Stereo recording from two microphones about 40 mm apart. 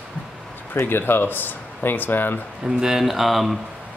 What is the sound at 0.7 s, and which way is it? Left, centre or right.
Speech, left.